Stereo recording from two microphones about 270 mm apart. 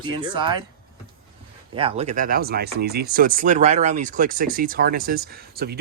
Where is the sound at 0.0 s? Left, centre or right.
Centre.